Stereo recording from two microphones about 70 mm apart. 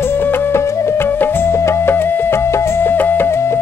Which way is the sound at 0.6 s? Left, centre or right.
Left.